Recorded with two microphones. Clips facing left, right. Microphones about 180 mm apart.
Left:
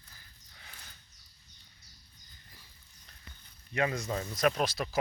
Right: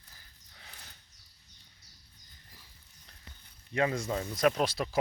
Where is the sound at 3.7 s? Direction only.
25° right (ahead or behind).